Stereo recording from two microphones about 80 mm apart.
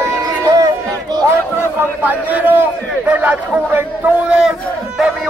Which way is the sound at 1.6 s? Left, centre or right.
Right.